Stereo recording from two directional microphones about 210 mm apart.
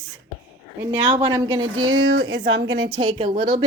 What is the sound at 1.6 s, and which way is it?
A woman's voice, 75° right (ahead or behind).